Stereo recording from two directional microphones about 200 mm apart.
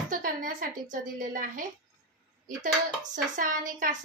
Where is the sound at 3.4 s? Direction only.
45° right (ahead or behind).